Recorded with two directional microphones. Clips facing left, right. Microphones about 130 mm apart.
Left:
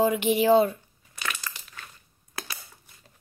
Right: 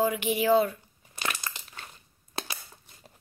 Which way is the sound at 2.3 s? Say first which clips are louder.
Right 2 dB; 25° right (ahead or behind).